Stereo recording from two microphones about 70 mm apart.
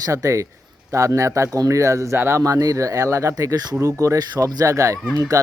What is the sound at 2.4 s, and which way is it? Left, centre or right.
Speech, right.